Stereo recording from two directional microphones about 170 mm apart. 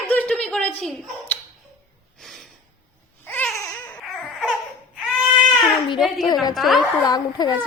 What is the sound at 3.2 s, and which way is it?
Baby cry, 10° left (ahead or behind).